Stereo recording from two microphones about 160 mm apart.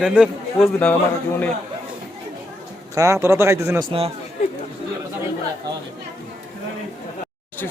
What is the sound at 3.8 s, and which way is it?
Speech, 35° right (ahead or behind).